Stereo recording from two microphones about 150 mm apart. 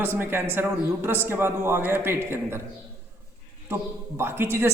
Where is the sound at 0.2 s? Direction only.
15° right (ahead or behind).